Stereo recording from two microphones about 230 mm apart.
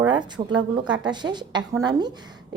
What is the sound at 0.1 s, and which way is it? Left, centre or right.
A woman's voice, centre.